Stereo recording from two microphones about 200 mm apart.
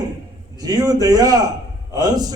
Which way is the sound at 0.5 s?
20° right (ahead or behind).